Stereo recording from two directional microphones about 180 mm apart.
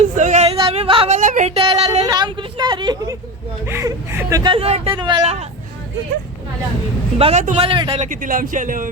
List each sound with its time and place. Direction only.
0.0 s a sound: 40° right (ahead or behind); by 3.2 s 25° right (ahead or behind)
3.7 s speech: 15° right (ahead or behind)
4.5 s speech: 30° right (ahead or behind)
5.2 s speech: 35° right (ahead or behind)
7.2 s speech: 35° right (ahead or behind)
8.1 s speech: 50° right (ahead or behind)